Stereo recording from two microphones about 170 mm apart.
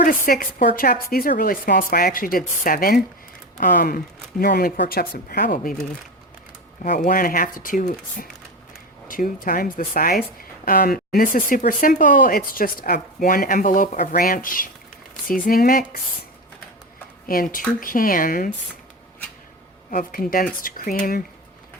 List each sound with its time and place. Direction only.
0.0 s speech: 55° left (ahead or behind)
6.8 s speech: 55° left (ahead or behind)
17.2 s speech: 55° left (ahead or behind)
19.9 s speech: 55° left (ahead or behind)